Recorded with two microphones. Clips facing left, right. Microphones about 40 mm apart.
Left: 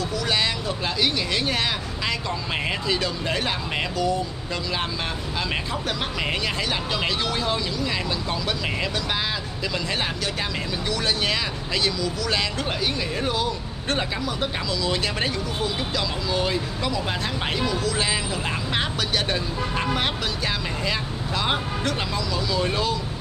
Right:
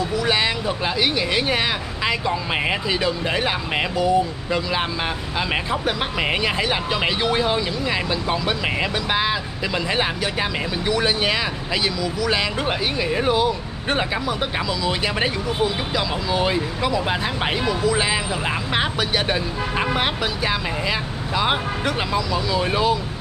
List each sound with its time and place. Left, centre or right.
0.1 s speech: centre
2.9 s speech: centre
5.7 s speech: right
10.9 s speech: centre